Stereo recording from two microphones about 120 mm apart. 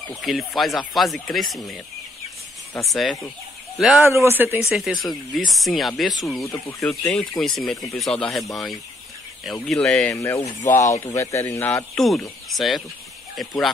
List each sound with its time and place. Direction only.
0.2 s speech: centre (ahead or behind)
2.8 s speech: centre (ahead or behind)
4.0 s speech: 20° right (ahead or behind)
4.6 s speech: 5° right (ahead or behind)
10.1 s speech: 25° left (ahead or behind)
11.9 s speech: 5° left (ahead or behind)